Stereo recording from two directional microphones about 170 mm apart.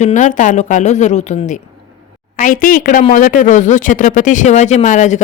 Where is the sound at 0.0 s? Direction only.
45° left (ahead or behind).